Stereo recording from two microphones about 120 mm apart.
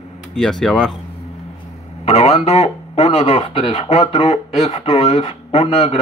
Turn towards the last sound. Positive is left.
turn(degrees=55)  # may be behind; listen again after turning